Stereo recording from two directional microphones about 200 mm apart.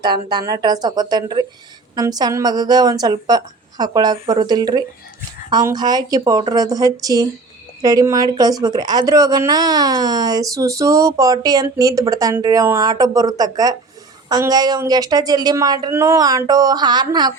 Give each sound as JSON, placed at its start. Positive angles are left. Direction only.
{"t": 0.0, "sound": "speech", "side_deg": -20}